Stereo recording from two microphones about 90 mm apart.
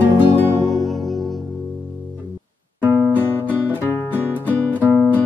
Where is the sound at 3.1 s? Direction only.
20° left (ahead or behind).